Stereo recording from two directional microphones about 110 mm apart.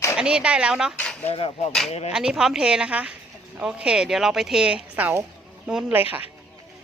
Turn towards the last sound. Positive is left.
turn(degrees=-15)  # may be behind; listen again after turning